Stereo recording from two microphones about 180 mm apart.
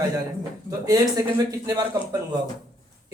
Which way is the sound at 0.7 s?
20° right (ahead or behind).